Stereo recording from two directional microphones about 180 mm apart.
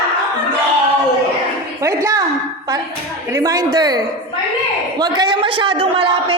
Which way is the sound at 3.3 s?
20° right (ahead or behind).